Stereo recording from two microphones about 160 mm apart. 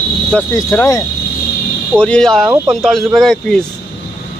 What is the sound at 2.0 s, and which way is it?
Speech, 5° left (ahead or behind).